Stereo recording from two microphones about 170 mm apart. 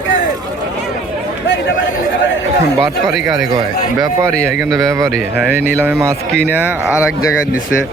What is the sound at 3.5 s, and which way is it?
Speech, 20° right (ahead or behind).